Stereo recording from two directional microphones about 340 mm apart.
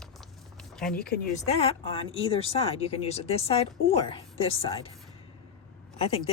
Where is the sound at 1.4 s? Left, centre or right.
Centre.